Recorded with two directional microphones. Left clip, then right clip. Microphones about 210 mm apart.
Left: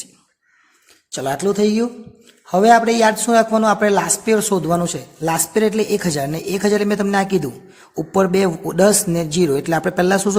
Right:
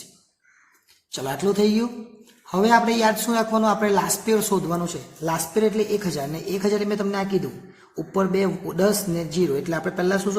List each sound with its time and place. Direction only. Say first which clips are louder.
1.1 s a man's voice: left 4 dB; 35° left (ahead or behind); by 10.3 s 50° left (ahead or behind)